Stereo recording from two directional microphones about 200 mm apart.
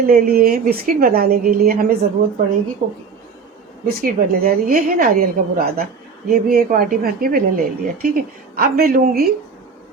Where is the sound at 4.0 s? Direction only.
45° right (ahead or behind).